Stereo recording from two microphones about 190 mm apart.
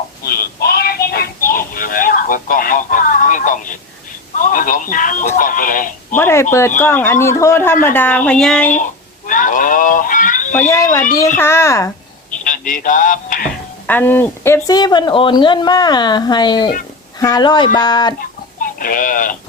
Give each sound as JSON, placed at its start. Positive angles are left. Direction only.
{"t": 0.2, "sound": "music", "side_deg": 55}
{"t": 4.4, "sound": "speech", "side_deg": 45}
{"t": 6.1, "sound": "a man's voice", "side_deg": 10}
{"t": 8.7, "sound": "a sound", "side_deg": 45}
{"t": 10.7, "sound": "a man's voice", "side_deg": 15}
{"t": 12.5, "sound": "music", "side_deg": 45}
{"t": 13.8, "sound": "speech", "side_deg": 10}
{"t": 18.6, "sound": "speech", "side_deg": 45}